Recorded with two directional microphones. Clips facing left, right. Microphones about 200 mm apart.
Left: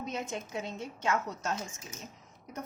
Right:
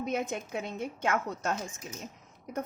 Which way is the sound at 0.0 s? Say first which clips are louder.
Right 5 dB; 55° right (ahead or behind).